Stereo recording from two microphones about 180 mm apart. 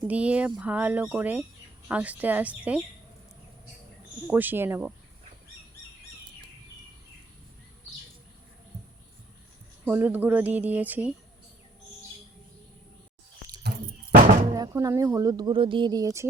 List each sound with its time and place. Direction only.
0.1 s speech: 5° right (ahead or behind)
4.3 s speech: 10° right (ahead or behind)
9.8 s speech: 10° right (ahead or behind)
13.6 s a sound: 65° right (ahead or behind)
14.5 s speech: 20° right (ahead or behind)